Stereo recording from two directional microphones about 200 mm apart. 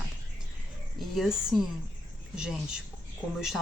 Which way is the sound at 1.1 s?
Centre (ahead or behind).